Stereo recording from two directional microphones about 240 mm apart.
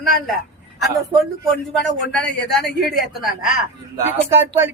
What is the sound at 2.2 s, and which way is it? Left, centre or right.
Speech, left.